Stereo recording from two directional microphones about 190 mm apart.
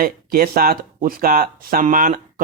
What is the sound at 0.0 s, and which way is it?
Speech, 50° right (ahead or behind).